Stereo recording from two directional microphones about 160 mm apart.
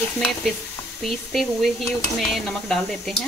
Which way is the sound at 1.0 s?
Centre (ahead or behind).